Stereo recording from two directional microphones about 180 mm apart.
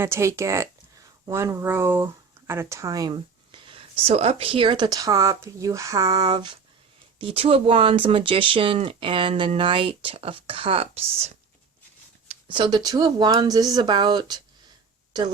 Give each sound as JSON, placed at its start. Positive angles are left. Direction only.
{"t": 0.0, "sound": "speech", "side_deg": -15}